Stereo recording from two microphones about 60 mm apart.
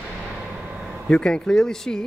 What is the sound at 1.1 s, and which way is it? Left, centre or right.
Speech, centre.